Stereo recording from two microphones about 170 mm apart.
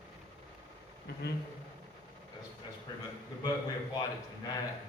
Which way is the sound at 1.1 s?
70° left (ahead or behind).